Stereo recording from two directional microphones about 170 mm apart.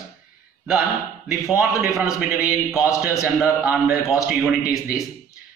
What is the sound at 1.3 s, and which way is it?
A man's voice, 10° right (ahead or behind).